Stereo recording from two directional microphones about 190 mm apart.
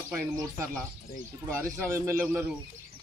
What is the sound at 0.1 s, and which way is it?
Speech, 15° right (ahead or behind).